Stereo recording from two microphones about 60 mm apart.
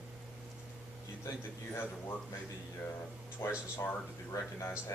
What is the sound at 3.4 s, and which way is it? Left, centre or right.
Speech, left.